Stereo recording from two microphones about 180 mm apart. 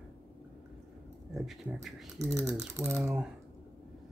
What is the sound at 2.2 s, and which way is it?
Speech, 15° right (ahead or behind).